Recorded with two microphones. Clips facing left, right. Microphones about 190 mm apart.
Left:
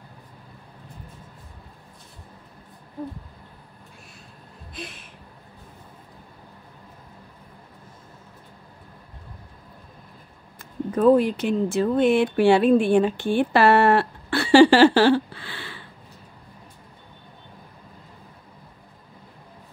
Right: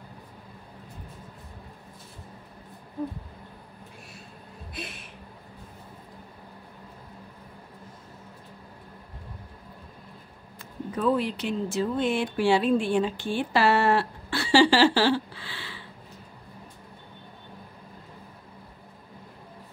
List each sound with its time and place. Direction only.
10.6 s speech: 45° left (ahead or behind)